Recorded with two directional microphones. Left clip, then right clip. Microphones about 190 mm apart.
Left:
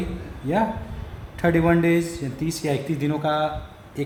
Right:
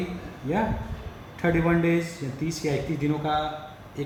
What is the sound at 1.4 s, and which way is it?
Speech, 55° left (ahead or behind).